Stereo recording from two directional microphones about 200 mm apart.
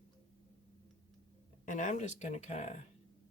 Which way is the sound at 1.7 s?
40° left (ahead or behind).